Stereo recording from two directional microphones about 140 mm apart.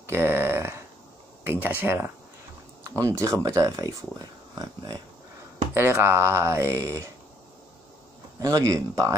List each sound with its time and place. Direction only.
0.0 s a sound: 15° right (ahead or behind)
1.4 s speech: 15° right (ahead or behind)
5.8 s speech: 15° right (ahead or behind)
8.4 s speech: 25° right (ahead or behind)